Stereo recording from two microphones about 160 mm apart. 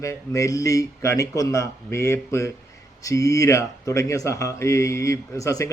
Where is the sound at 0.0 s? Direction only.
20° left (ahead or behind).